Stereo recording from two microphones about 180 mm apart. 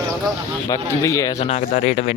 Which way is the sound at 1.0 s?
15° left (ahead or behind).